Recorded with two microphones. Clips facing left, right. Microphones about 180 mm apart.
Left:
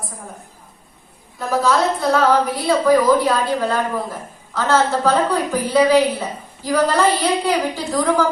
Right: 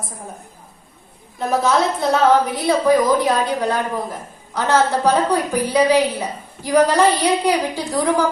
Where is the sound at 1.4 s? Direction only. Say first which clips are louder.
Even; 20° right (ahead or behind).